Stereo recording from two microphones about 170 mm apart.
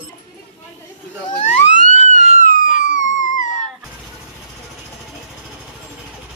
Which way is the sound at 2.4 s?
50° left (ahead or behind).